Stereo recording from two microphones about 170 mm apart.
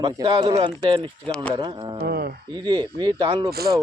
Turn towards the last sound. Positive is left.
turn(degrees=-65)  # may be behind; listen again after turning